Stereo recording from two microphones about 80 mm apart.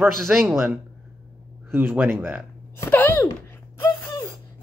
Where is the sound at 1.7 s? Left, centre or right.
Right.